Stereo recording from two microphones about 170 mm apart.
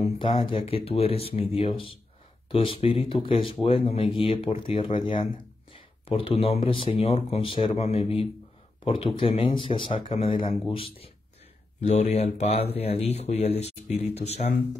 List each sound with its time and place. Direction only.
0.0 s speech: 30° left (ahead or behind)